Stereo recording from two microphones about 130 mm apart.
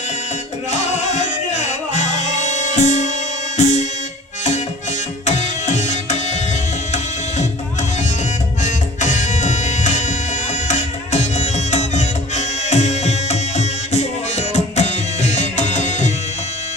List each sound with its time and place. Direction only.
0.7 s music: 65° left (ahead or behind)
5.2 s music: 60° left (ahead or behind)
8.6 s music: 65° left (ahead or behind)